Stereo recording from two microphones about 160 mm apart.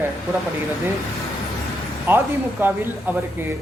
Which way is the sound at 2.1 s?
15° right (ahead or behind).